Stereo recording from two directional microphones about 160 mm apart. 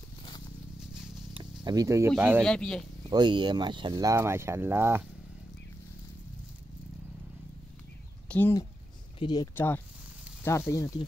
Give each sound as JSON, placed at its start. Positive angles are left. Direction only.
{"t": 1.3, "sound": "speech", "side_deg": -25}
{"t": 2.4, "sound": "speech", "side_deg": 5}
{"t": 3.1, "sound": "speech", "side_deg": -30}
{"t": 8.3, "sound": "speech", "side_deg": 10}
{"t": 9.2, "sound": "speech", "side_deg": 25}